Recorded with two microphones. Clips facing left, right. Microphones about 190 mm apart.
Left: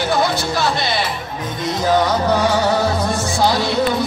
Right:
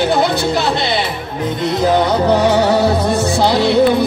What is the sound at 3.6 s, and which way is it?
Speech, 60° right (ahead or behind).